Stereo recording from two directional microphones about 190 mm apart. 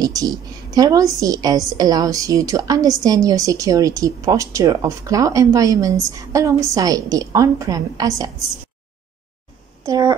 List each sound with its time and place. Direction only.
0.0 s a woman's voice: 20° right (ahead or behind)
9.8 s a woman's voice: 15° right (ahead or behind)